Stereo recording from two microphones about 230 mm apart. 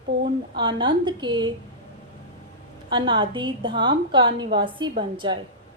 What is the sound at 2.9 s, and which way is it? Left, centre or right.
A woman's voice, right.